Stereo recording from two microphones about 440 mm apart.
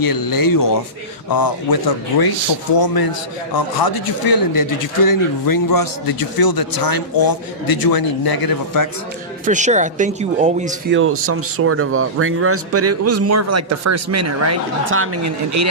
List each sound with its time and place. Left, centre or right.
0.0 s speech: left
9.5 s speech: centre; by 15.7 s right